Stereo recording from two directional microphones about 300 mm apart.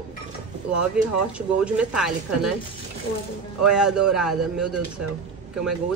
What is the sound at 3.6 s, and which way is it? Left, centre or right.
Speech, centre.